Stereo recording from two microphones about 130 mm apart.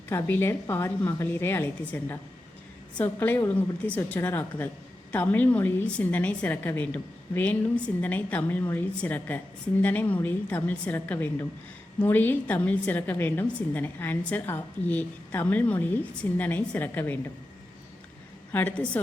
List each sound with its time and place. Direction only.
0.1 s a woman's voice: 15° left (ahead or behind)
18.5 s a woman's voice: 15° left (ahead or behind)